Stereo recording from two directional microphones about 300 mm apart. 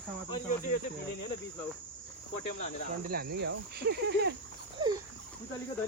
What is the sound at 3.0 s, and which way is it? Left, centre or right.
Speech, right.